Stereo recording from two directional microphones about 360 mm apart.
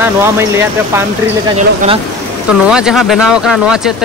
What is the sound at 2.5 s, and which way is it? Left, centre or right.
Speech, centre.